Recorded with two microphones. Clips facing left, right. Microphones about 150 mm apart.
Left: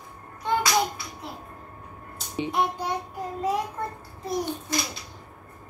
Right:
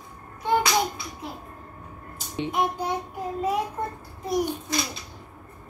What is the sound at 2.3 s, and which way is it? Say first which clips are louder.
Child singing: even; centre (ahead or behind).